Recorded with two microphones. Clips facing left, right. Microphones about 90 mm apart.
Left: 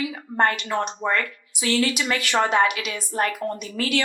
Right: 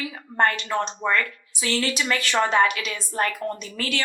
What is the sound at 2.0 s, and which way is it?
A woman's voice, 30° left (ahead or behind).